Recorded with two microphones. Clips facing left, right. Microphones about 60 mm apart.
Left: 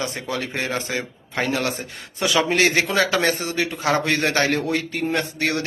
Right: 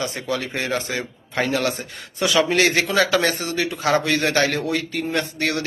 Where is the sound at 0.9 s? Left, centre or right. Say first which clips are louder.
Even; centre.